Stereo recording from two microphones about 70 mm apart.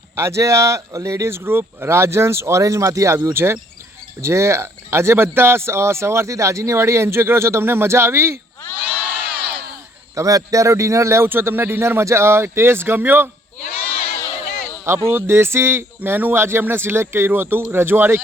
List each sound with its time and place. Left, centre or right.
0.2 s speech: right
8.8 s crowd: right
10.2 s speech: right
14.8 s speech: right